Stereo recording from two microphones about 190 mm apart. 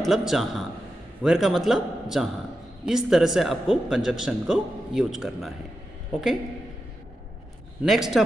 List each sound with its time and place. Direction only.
0.0 s speech: centre (ahead or behind)
7.8 s speech: centre (ahead or behind)